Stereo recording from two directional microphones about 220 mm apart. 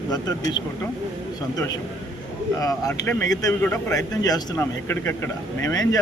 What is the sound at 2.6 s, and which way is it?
A man's voice, 15° left (ahead or behind).